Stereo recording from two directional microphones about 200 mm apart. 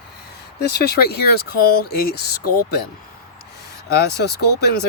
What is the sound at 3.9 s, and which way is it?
Speech, 55° left (ahead or behind).